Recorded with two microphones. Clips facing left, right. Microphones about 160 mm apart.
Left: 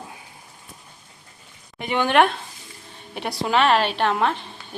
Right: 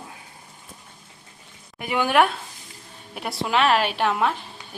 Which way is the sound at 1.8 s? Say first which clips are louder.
Left 1 dB; 5° right (ahead or behind).